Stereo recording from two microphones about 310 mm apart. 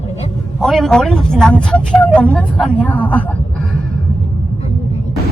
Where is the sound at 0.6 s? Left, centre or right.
Centre.